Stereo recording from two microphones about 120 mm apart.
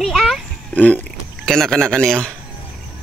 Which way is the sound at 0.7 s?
10° left (ahead or behind).